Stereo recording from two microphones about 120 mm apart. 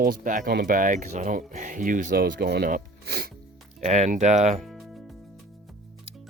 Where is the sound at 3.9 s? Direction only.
80° right.